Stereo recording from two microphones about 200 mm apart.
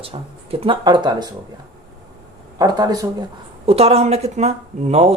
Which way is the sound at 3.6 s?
30° right (ahead or behind).